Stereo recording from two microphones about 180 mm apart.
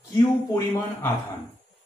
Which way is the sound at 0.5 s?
15° left (ahead or behind).